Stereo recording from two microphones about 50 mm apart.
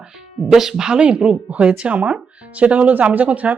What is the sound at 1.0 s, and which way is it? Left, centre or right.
Speech, right.